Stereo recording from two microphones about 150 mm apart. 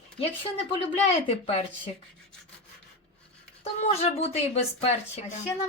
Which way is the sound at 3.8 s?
45° left (ahead or behind).